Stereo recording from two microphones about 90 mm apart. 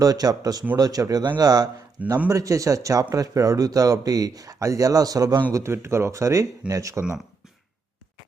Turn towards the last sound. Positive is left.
turn(degrees=-40)  # may be behind; listen again after turning